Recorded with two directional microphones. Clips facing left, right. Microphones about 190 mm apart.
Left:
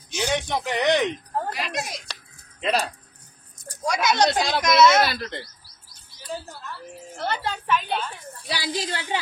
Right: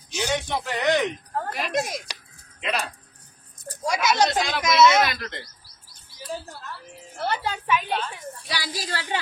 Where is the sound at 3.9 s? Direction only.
5° right (ahead or behind).